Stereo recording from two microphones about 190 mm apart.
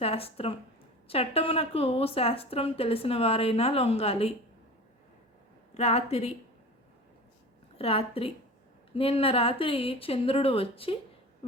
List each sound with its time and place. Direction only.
0.0 s a woman's voice: 30° left (ahead or behind)
5.7 s a woman's voice: 35° left (ahead or behind)
7.8 s speech: 30° left (ahead or behind)